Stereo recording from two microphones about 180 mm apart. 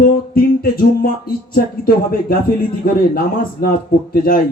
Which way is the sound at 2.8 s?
55° left (ahead or behind).